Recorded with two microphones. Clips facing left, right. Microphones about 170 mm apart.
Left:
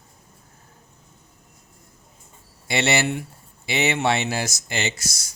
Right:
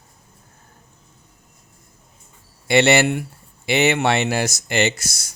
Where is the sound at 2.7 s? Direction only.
65° right (ahead or behind).